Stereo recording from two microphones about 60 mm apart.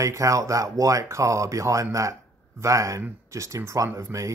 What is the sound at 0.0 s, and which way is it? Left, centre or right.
Speech, right.